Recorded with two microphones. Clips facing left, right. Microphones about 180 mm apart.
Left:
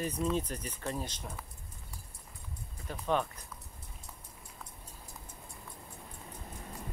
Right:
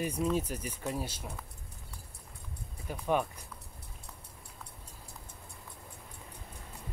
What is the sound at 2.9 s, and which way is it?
Speech, 10° right (ahead or behind).